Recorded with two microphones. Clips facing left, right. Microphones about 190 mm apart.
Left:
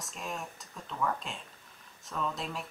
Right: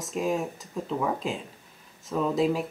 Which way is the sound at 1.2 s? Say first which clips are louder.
Right 12 dB; centre (ahead or behind).